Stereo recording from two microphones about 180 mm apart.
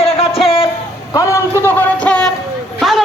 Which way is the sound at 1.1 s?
15° left (ahead or behind).